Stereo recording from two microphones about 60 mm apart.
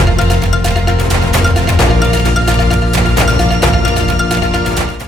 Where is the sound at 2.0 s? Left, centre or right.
Centre.